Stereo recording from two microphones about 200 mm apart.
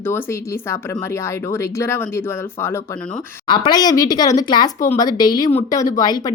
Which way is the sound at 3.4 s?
25° left (ahead or behind).